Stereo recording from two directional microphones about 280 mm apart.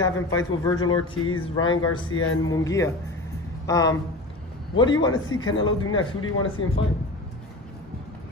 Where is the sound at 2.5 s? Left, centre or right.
Centre.